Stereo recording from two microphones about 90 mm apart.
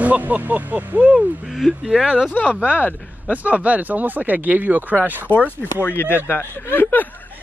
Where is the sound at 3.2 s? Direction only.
15° right (ahead or behind).